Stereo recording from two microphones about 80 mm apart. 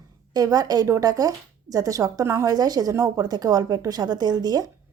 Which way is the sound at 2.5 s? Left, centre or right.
Right.